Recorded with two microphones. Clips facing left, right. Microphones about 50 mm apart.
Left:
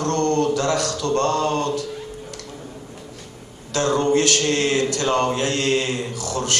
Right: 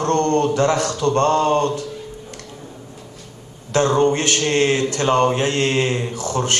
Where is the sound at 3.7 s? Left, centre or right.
Right.